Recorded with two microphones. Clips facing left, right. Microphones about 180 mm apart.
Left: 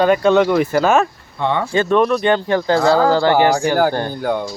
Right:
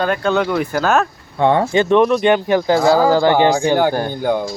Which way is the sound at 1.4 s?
50° right (ahead or behind).